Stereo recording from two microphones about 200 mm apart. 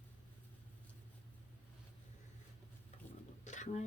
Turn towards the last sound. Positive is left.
turn(degrees=35)  # may be behind; listen again after turning